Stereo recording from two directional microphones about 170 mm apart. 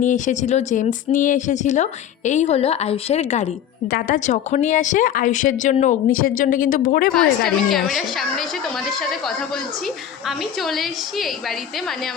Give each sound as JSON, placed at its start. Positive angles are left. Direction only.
{"t": 0.0, "sound": "speech", "side_deg": 45}
{"t": 7.1, "sound": "a woman's voice", "side_deg": 5}
{"t": 10.2, "sound": "a woman's voice", "side_deg": 0}